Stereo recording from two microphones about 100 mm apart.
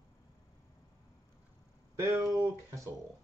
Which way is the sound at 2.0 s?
35° right (ahead or behind).